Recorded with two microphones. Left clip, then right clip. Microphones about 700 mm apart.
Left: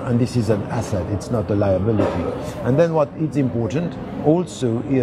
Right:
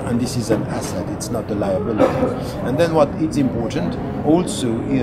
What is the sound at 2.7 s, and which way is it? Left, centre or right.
Speech, left.